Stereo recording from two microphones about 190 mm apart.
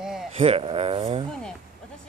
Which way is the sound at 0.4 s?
30° right (ahead or behind).